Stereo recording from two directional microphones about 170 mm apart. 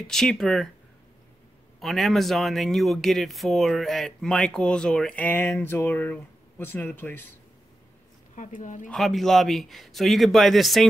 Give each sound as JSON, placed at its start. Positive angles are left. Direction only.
{"t": 0.0, "sound": "speech", "side_deg": 5}
{"t": 1.8, "sound": "speech", "side_deg": 0}
{"t": 8.4, "sound": "speech", "side_deg": 50}
{"t": 8.8, "sound": "speech", "side_deg": 0}